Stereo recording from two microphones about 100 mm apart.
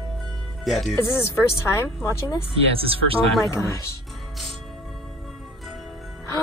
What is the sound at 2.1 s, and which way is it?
Speech, 30° left (ahead or behind).